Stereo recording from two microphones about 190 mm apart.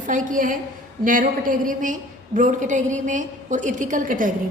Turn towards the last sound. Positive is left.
turn(degrees=-45)  # may be behind; listen again after turning